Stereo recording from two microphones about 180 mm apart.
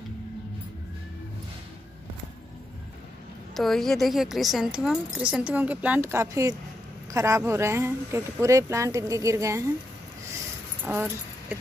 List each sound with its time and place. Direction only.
3.5 s a woman's voice: centre (ahead or behind); by 9.7 s 15° right (ahead or behind)
10.9 s speech: 10° right (ahead or behind)